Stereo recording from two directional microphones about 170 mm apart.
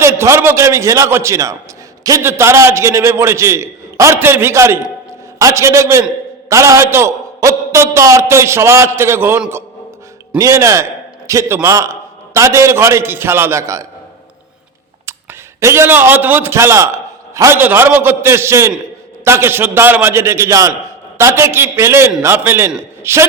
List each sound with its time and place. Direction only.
0.0 s a man's voice: 15° right (ahead or behind)
15.0 s a man's voice: 15° right (ahead or behind)